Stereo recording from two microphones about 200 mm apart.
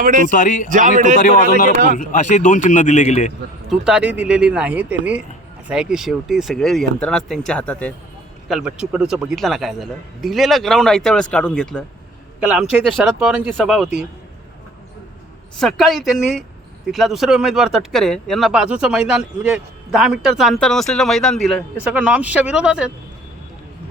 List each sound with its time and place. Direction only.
0.0 s a man's voice: 40° right (ahead or behind)
0.3 s a man's voice: 40° left (ahead or behind)
0.7 s a man's voice: 40° right (ahead or behind)
2.0 s a man's voice: 40° left (ahead or behind)
3.7 s speech: 5° right (ahead or behind)
8.4 s a man's voice: 5° right (ahead or behind)
15.5 s speech: centre (ahead or behind)